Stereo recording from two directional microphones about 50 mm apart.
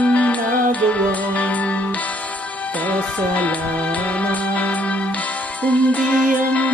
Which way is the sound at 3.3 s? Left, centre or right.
Left.